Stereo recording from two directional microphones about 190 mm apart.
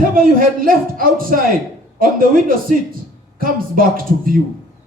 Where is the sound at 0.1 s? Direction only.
50° right (ahead or behind).